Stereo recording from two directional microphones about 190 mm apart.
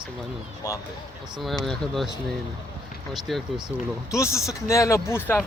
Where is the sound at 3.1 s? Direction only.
Centre (ahead or behind).